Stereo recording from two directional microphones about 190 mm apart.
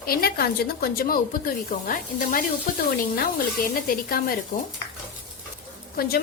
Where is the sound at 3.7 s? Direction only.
50° left (ahead or behind).